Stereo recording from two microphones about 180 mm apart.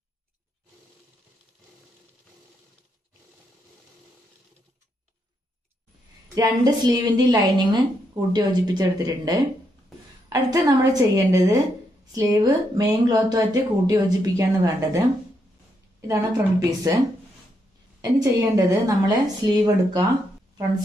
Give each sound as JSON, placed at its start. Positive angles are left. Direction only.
{"t": 6.2, "sound": "a woman's voice", "side_deg": -20}
{"t": 16.1, "sound": "a woman's voice", "side_deg": -20}
{"t": 18.2, "sound": "a woman's voice", "side_deg": -20}